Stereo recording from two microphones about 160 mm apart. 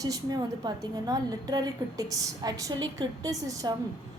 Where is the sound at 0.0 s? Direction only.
25° right (ahead or behind).